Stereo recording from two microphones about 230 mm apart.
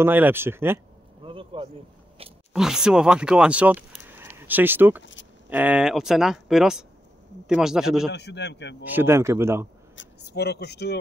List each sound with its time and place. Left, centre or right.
0.0 s speech: centre
1.2 s a sound: right
2.5 s speech: centre
4.1 s a sound: centre
5.5 s speech: centre
8.1 s a man's voice: left
8.8 s speech: centre
9.9 s speech: left